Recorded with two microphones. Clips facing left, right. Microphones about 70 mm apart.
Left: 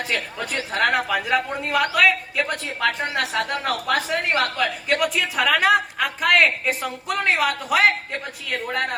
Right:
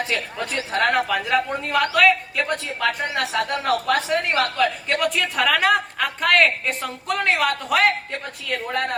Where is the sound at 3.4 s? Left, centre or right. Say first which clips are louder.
Right 2 dB; right.